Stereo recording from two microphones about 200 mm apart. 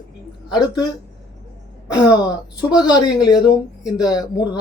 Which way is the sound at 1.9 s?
20° left (ahead or behind).